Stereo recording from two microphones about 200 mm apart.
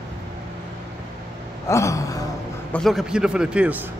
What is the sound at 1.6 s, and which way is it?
Gasp, 15° left (ahead or behind).